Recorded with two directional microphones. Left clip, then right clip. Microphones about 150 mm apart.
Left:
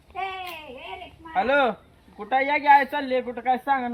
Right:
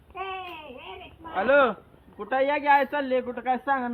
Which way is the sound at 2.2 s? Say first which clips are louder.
Left 2 dB; 90° left.